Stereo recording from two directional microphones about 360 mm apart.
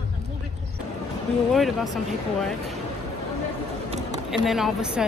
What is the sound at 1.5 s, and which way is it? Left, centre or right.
Speech, centre.